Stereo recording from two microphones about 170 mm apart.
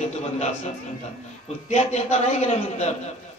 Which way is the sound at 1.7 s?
40° left (ahead or behind).